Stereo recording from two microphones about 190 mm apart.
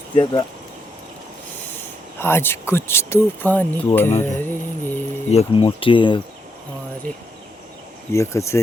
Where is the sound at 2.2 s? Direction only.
10° left (ahead or behind).